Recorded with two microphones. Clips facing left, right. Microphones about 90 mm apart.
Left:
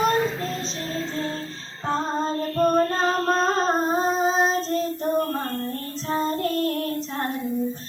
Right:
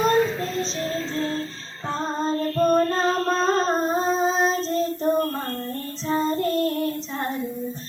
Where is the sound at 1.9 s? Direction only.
5° left (ahead or behind).